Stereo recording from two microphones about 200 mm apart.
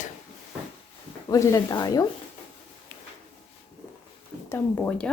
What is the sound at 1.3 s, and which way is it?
Speech, 15° left (ahead or behind).